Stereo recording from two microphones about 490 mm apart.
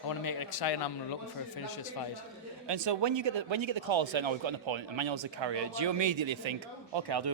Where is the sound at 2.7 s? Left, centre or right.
Right.